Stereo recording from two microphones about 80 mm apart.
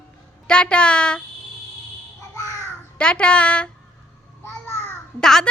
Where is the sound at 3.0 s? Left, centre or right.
Centre.